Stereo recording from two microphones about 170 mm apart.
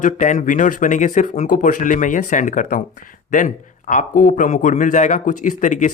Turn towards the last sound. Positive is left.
turn(degrees=45)  # may be behind; listen again after turning